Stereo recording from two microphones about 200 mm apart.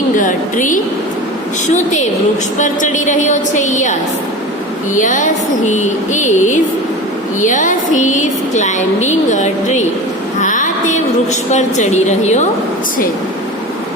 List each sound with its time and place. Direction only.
0.2 s a sound: 40° left (ahead or behind)
1.6 s a woman's voice: 35° left (ahead or behind)
4.9 s a woman's voice: 40° left (ahead or behind)